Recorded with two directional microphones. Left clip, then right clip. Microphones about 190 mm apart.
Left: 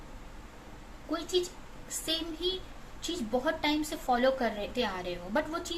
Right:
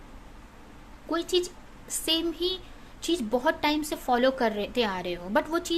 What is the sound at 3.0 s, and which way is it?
A woman's voice, 50° right (ahead or behind).